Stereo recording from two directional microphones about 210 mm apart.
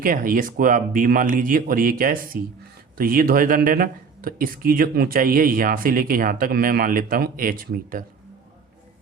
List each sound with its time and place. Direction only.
0.0 s speech: 40° right (ahead or behind)